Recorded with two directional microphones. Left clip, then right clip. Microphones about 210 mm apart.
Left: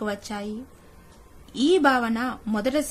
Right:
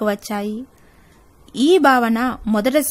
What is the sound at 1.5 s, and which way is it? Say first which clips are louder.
A woman's voice: right 6 dB; 50° right (ahead or behind).